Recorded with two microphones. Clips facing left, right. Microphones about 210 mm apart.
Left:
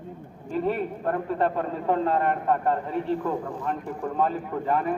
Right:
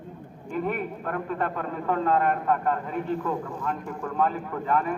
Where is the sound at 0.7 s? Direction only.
25° left (ahead or behind).